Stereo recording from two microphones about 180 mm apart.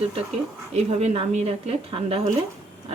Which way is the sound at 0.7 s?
35° right (ahead or behind).